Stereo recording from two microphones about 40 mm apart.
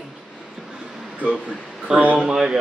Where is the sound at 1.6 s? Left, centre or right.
Centre.